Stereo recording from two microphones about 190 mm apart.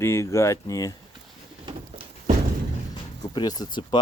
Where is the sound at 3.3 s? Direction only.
20° left (ahead or behind).